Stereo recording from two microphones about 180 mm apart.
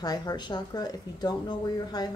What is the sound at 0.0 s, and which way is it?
A woman's voice, 20° left (ahead or behind).